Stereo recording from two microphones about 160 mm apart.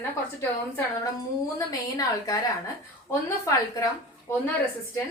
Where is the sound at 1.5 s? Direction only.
20° left (ahead or behind).